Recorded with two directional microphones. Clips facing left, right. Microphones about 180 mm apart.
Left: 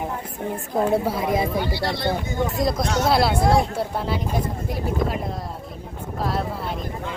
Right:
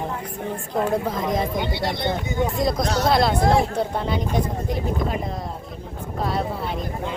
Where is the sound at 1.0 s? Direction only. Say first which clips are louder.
Left 1 dB; 10° left (ahead or behind).